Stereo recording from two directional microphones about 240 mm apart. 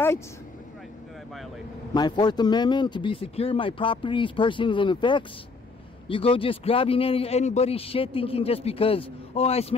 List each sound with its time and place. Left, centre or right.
2.0 s a man's voice: centre